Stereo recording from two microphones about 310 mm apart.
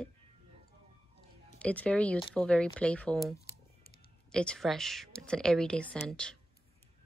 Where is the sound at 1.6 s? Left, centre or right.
Centre.